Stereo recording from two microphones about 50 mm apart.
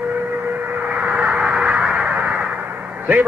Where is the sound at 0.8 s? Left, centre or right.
Right.